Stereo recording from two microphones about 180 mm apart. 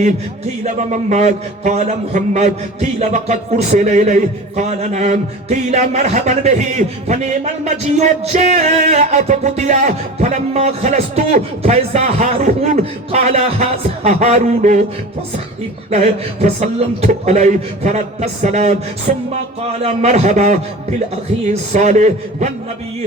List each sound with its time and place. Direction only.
0.6 s music: 40° right (ahead or behind)
15.9 s music: 40° right (ahead or behind)